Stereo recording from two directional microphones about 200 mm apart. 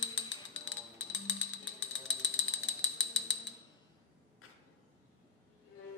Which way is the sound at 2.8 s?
70° left (ahead or behind).